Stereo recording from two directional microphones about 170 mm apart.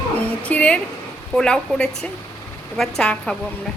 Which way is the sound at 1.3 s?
5° left (ahead or behind).